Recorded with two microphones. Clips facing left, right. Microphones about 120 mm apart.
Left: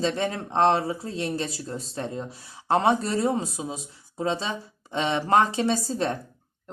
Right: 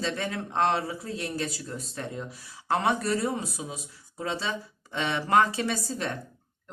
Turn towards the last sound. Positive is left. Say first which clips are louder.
# left 6 dB
turn(degrees=30)  # may be behind; listen again after turning